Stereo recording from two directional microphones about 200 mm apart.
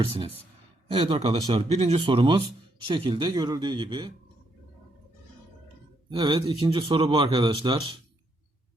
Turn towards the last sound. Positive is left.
turn(degrees=-25)  # may be behind; listen again after turning